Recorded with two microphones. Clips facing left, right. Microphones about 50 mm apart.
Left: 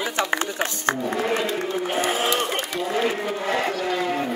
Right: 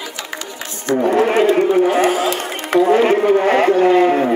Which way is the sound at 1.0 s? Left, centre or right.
Right.